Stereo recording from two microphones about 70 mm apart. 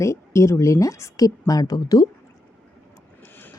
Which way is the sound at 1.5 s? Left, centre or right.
Left.